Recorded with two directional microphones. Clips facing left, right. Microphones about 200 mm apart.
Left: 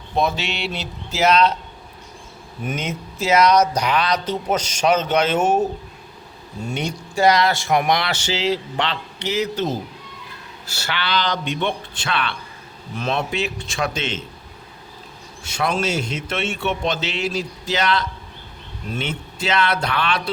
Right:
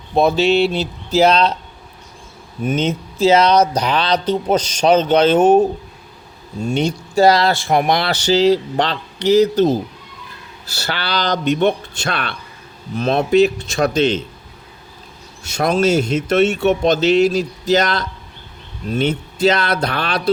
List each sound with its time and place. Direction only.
0.2 s speech: 35° right (ahead or behind)
2.6 s speech: 25° right (ahead or behind)
6.7 s speech: 30° right (ahead or behind)
15.4 s speech: 40° right (ahead or behind)